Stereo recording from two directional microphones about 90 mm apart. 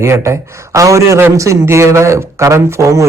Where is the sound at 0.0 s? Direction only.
35° right (ahead or behind).